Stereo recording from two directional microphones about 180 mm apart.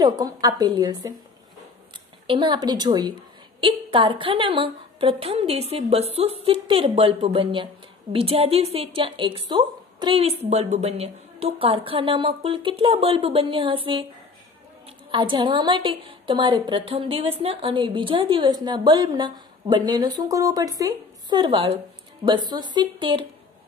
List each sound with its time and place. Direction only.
0.0 s a woman's voice: 25° right (ahead or behind)
2.2 s a woman's voice: 25° right (ahead or behind)
15.0 s a woman's voice: 25° right (ahead or behind)